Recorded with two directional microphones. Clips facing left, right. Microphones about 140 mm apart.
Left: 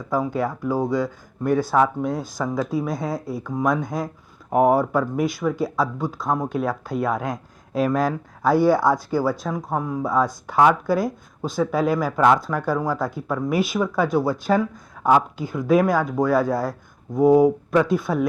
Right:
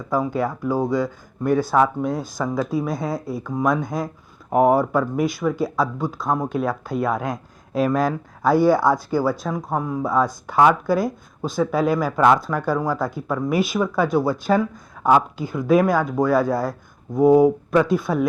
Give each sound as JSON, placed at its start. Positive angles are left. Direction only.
{"t": 0.0, "sound": "speech", "side_deg": -25}
{"t": 1.9, "sound": "speech", "side_deg": -25}
{"t": 5.2, "sound": "speech", "side_deg": -10}
{"t": 13.5, "sound": "speech", "side_deg": -10}
{"t": 17.7, "sound": "speech", "side_deg": -15}